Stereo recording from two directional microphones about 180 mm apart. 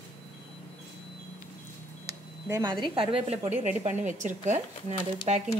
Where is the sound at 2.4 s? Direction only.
20° right (ahead or behind).